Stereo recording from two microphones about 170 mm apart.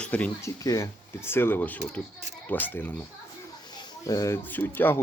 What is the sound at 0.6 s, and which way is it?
Speech, 20° left (ahead or behind).